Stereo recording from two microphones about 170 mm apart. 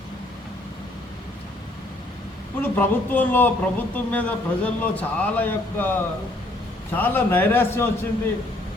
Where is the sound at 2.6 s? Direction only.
10° left (ahead or behind).